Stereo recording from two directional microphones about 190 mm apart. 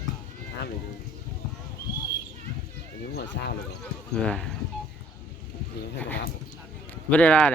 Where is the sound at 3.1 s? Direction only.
60° left (ahead or behind).